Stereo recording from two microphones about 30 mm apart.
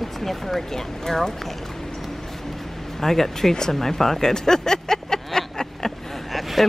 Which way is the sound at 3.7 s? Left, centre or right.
Centre.